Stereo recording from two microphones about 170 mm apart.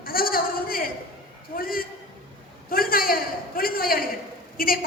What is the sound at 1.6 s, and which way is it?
Speech, 60° left (ahead or behind).